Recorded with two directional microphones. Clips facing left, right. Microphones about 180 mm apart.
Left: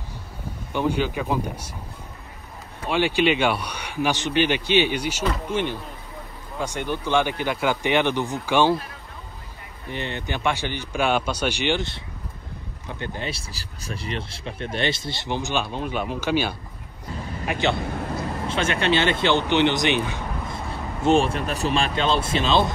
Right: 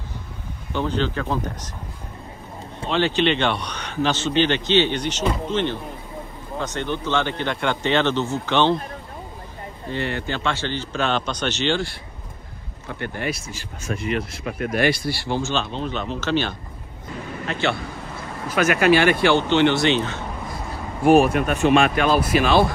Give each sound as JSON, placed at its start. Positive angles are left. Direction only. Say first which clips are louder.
{"t": 0.7, "sound": "a man's voice", "louder": "even", "side_deg": 10}
{"t": 2.9, "sound": "a man's voice", "louder": "even", "side_deg": 10}
{"t": 9.8, "sound": "a man's voice", "louder": "right 3 dB", "side_deg": 20}
{"t": 13.3, "sound": "a man's voice", "louder": "right 5 dB", "side_deg": 35}
{"t": 18.5, "sound": "a man's voice", "louder": "right 6 dB", "side_deg": 25}
{"t": 21.1, "sound": "speech", "louder": "right 5 dB", "side_deg": 30}